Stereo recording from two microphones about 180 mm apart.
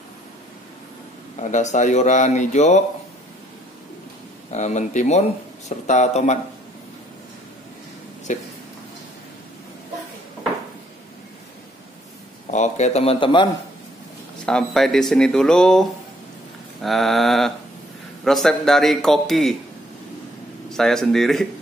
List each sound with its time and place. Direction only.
1.3 s speech: 40° left (ahead or behind)
4.5 s speech: 40° left (ahead or behind)
8.3 s speech: 45° left (ahead or behind)
12.4 s speech: 40° left (ahead or behind)
14.4 s speech: 5° left (ahead or behind)
20.7 s speech: centre (ahead or behind)